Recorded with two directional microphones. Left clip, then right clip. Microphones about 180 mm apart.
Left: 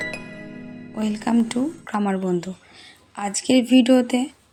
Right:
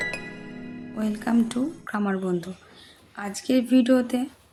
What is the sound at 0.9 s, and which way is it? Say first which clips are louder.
Speech: left 3 dB; 15° left (ahead or behind).